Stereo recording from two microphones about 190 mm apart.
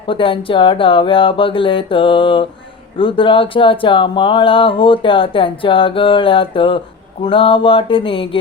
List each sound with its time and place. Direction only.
0.1 s speech: 25° left (ahead or behind)